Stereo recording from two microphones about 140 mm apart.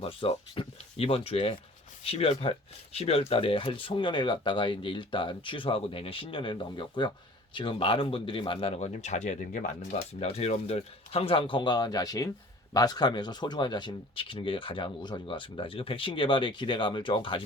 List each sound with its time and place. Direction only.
0.0 s speech: 40° left (ahead or behind); by 9.7 s 70° left (ahead or behind)
10.2 s speech: 50° left (ahead or behind)